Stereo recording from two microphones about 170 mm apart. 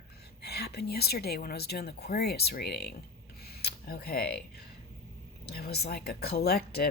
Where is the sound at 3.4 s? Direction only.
70° left (ahead or behind).